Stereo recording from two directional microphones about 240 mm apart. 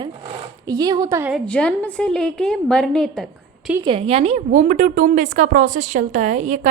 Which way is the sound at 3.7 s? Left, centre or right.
Centre.